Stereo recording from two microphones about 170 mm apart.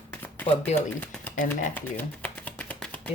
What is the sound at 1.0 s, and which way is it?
Speech, 10° left (ahead or behind).